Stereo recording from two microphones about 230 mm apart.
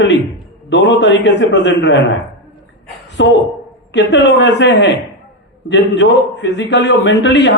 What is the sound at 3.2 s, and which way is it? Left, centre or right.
A man's voice, left.